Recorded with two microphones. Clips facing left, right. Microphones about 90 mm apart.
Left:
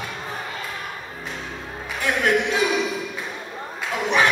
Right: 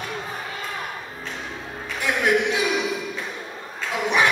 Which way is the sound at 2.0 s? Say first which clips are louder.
Even; 15° right (ahead or behind).